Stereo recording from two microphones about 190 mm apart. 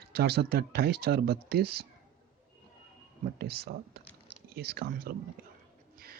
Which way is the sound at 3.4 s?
55° right (ahead or behind).